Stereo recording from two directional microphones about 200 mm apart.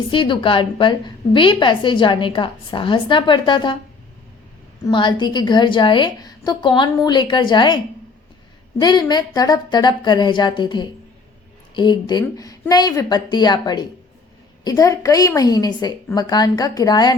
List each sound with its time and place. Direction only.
0.1 s a woman's voice: 25° left (ahead or behind)
4.8 s a woman's voice: 25° left (ahead or behind)
8.8 s a woman's voice: 20° left (ahead or behind)